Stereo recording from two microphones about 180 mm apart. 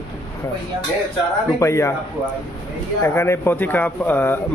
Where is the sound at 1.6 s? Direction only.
15° left (ahead or behind).